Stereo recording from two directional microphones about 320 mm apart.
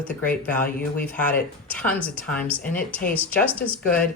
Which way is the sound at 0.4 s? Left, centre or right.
Centre.